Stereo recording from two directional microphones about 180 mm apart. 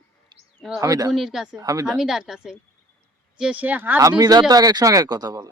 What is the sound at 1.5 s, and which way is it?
Speech, 20° right (ahead or behind).